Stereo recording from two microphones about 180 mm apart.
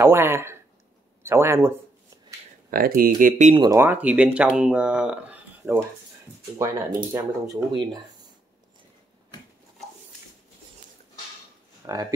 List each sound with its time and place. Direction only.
0.0 s speech: 15° right (ahead or behind)
2.7 s speech: 50° right (ahead or behind)
3.5 s speech: 25° right (ahead or behind)
3.8 s speech: 10° right (ahead or behind)
11.8 s speech: 20° right (ahead or behind)